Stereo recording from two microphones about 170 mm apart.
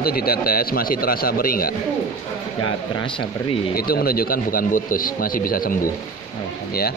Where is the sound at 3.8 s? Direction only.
65° left (ahead or behind).